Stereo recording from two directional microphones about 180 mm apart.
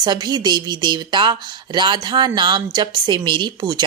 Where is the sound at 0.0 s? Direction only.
25° right (ahead or behind).